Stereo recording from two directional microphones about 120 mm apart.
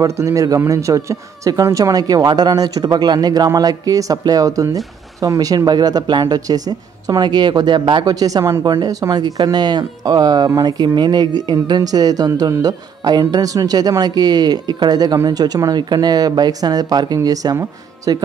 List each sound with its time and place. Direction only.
0.0 s a man's voice: 25° right (ahead or behind)